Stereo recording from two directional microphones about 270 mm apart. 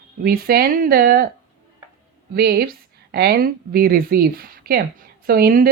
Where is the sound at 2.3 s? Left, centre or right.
Right.